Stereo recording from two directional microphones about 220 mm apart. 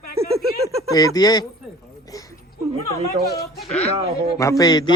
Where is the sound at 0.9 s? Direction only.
15° left (ahead or behind).